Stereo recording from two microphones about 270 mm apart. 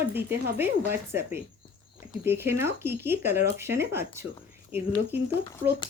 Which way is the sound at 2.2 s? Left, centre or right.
Centre.